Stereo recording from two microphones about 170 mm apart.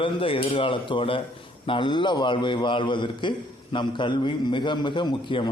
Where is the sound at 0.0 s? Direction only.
30° left (ahead or behind).